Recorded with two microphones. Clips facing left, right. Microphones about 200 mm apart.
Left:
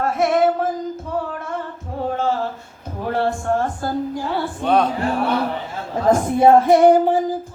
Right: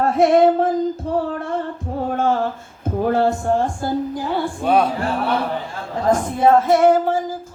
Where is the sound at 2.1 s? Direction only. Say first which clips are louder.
Right 3 dB; 50° right (ahead or behind).